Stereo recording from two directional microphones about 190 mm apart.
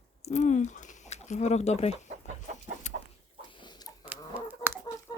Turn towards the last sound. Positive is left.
turn(degrees=-10)  # may be behind; listen again after turning